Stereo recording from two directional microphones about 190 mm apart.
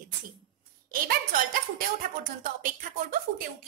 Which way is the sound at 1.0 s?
50° right (ahead or behind).